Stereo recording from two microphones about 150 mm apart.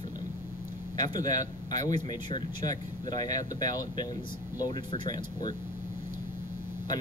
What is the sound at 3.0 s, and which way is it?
Speech, 25° left (ahead or behind).